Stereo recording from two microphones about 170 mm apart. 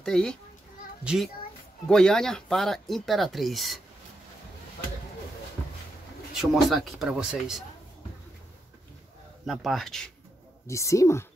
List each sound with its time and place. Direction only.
0.0 s speech: 5° left (ahead or behind)
6.3 s speech: centre (ahead or behind)
9.5 s speech: centre (ahead or behind)
10.7 s a woman's voice: 20° left (ahead or behind)